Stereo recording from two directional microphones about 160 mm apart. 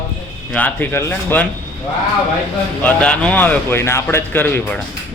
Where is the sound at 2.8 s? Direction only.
10° left (ahead or behind).